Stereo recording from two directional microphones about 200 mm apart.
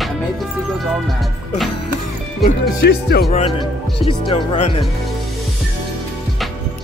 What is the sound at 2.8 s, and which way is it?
Speech, 50° left (ahead or behind).